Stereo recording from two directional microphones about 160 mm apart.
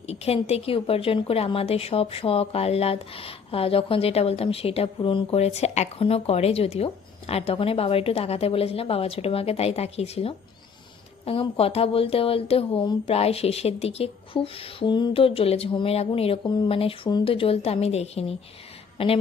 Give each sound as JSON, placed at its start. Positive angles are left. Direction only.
{"t": 0.1, "sound": "a woman's voice", "side_deg": 40}